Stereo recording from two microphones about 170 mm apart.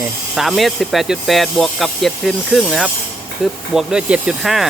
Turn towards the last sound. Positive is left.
turn(degrees=0)  # may be behind; listen again after turning